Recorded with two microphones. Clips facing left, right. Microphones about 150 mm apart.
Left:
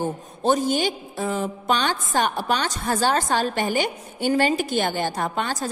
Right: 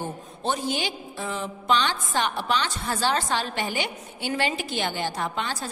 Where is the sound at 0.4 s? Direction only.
45° left (ahead or behind).